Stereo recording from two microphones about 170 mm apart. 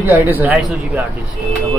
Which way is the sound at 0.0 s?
10° right (ahead or behind).